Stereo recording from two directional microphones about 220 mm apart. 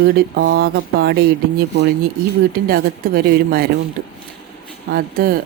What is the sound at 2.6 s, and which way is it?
Speech, 45° right (ahead or behind).